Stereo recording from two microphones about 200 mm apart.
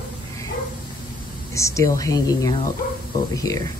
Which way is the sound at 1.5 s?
15° left (ahead or behind).